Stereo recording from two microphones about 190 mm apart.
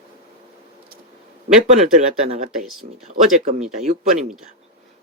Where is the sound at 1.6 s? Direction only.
35° right (ahead or behind).